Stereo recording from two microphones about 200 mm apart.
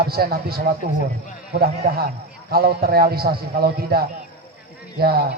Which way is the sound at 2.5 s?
50° right (ahead or behind).